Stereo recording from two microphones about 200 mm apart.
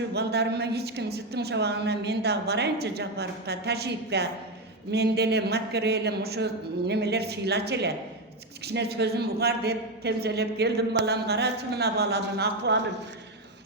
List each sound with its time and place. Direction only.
0.1 s a man's voice: 55° right (ahead or behind)